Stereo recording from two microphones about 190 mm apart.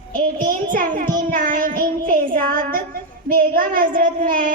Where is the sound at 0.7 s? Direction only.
45° right (ahead or behind).